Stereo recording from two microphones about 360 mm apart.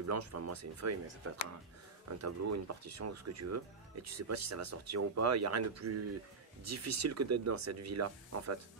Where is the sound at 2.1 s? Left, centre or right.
Right.